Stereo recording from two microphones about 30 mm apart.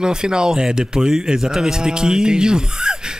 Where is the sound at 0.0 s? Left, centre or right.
Right.